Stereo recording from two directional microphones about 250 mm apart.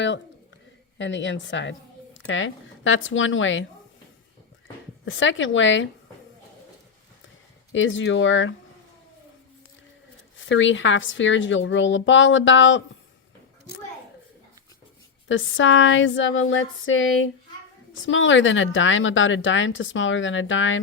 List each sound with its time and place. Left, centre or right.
0.9 s speech: left
5.0 s speech: left
7.7 s speech: left
10.4 s speech: left
15.3 s speech: left
18.0 s speech: left